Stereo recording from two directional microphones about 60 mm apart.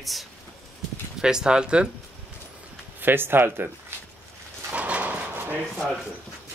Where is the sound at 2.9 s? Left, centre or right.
Right.